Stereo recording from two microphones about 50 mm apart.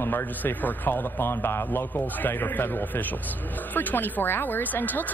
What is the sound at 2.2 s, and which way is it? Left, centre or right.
Speech, left.